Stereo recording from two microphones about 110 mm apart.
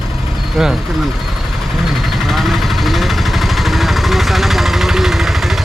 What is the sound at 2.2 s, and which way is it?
Vehicle, centre (ahead or behind).